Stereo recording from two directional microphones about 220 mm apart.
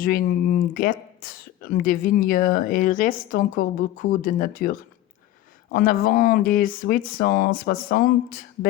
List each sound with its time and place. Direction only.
0.0 s speech: 40° left (ahead or behind)